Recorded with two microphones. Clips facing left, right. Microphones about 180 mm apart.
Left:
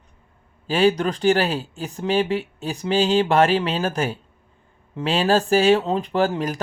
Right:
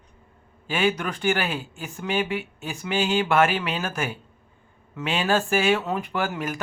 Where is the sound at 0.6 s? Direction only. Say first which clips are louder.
Left 6 dB; 35° left (ahead or behind).